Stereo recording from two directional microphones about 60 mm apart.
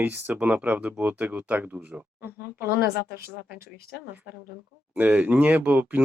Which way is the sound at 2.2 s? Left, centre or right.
Right.